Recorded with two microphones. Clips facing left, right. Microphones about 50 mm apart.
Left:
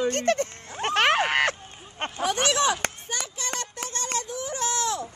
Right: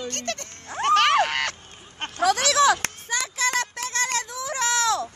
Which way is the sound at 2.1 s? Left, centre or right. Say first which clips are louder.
Right 4 dB; right.